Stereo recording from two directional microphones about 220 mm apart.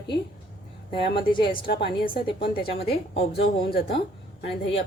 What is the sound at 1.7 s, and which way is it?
A woman's voice, 45° left (ahead or behind).